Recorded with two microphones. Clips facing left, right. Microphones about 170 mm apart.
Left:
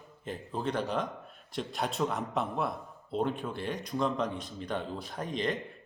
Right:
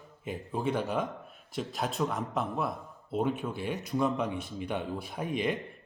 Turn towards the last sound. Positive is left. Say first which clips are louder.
# right 2 dB
turn(degrees=-10)  # may be behind; listen again after turning